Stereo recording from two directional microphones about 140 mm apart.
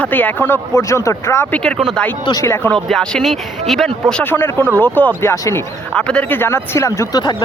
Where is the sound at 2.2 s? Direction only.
25° left (ahead or behind).